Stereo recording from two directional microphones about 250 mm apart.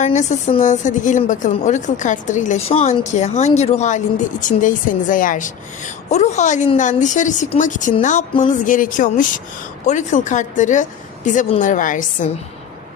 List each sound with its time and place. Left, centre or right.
0.0 s a woman's voice: left